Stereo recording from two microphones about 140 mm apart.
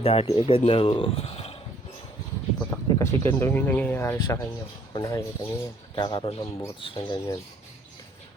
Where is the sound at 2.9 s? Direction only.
20° left (ahead or behind).